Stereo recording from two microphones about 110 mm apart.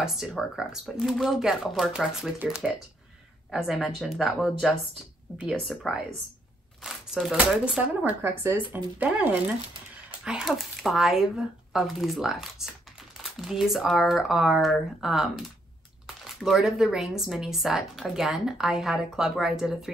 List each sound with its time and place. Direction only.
0.0 s speech: 5° right (ahead or behind)
8.0 s speech: 20° right (ahead or behind); by 19.9 s 5° right (ahead or behind)